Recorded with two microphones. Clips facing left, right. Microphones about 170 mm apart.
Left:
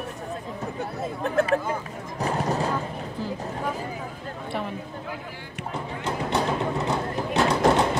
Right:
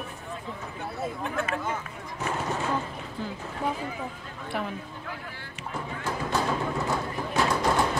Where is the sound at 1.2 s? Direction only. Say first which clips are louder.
Left 10 dB; 35° left (ahead or behind).